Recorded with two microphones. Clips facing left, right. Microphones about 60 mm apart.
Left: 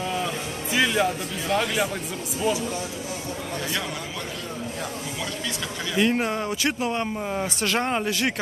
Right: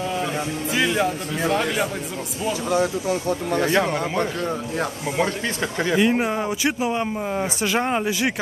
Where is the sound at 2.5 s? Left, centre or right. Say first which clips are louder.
Right 8 dB; right.